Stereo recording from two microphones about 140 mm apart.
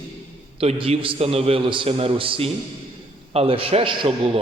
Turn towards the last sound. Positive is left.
turn(degrees=-40)  # may be behind; listen again after turning